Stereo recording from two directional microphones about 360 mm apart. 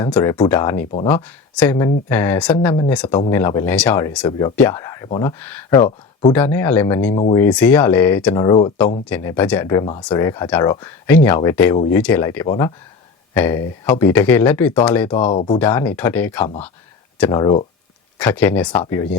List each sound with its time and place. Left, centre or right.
0.0 s speech: centre
1.1 s speech: centre